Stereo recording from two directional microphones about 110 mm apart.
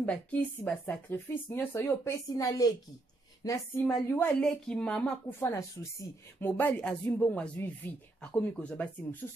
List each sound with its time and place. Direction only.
0.0 s speech: 15° left (ahead or behind); by 2.7 s 30° left (ahead or behind)
3.4 s a sound: 30° left (ahead or behind)
3.8 s speech: 10° left (ahead or behind)
5.4 s speech: 25° left (ahead or behind); by 9.2 s 10° left (ahead or behind)